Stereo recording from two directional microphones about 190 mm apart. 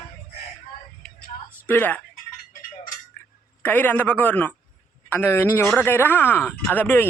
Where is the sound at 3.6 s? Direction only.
10° left (ahead or behind).